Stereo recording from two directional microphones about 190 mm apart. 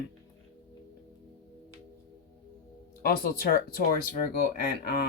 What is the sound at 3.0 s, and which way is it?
Speech, 55° left (ahead or behind).